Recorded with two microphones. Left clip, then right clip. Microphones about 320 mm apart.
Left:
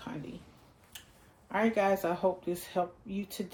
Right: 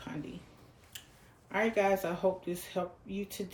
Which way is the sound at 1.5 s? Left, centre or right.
Centre.